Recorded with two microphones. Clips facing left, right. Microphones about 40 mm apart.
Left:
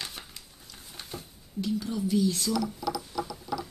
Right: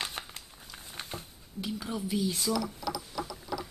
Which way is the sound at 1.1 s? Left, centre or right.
Centre.